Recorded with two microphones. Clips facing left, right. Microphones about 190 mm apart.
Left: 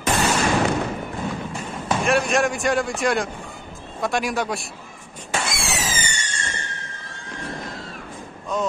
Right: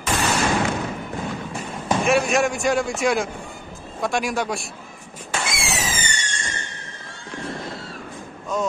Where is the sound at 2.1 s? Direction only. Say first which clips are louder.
Right 1 dB; centre (ahead or behind).